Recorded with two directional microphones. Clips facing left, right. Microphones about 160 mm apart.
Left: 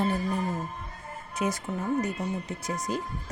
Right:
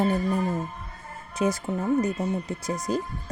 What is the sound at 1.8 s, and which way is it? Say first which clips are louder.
Speech: right 4 dB; 35° right (ahead or behind).